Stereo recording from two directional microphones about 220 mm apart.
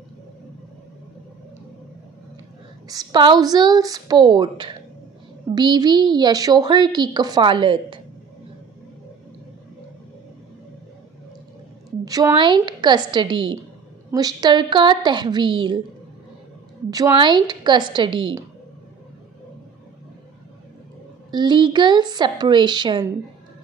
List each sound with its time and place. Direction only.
2.9 s a woman's voice: 20° right (ahead or behind)
12.0 s a woman's voice: 15° right (ahead or behind)
16.9 s a woman's voice: 20° right (ahead or behind)
21.3 s a woman's voice: 20° right (ahead or behind)